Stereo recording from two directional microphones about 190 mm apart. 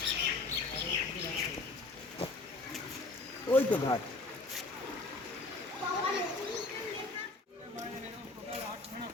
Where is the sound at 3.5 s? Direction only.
10° left (ahead or behind).